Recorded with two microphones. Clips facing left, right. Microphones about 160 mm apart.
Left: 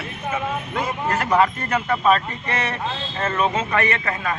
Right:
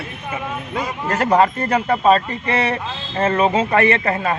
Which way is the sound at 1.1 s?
35° right (ahead or behind).